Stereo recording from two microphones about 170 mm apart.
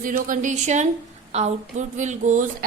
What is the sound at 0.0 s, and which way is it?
A woman's voice, 50° right (ahead or behind).